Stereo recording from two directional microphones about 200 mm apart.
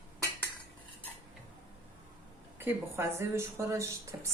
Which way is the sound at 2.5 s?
10° right (ahead or behind).